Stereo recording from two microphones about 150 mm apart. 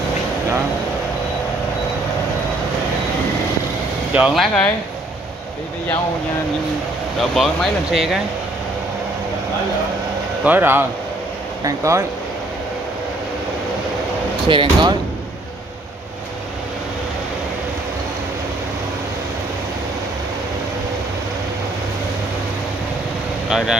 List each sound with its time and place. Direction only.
4.1 s speech: 5° right (ahead or behind)
7.2 s speech: centre (ahead or behind)
10.4 s speech: 15° right (ahead or behind)
14.5 s speech: 30° right (ahead or behind)
23.5 s speech: 5° right (ahead or behind)